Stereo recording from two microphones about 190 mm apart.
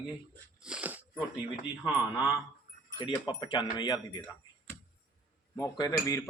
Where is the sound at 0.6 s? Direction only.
5° right (ahead or behind).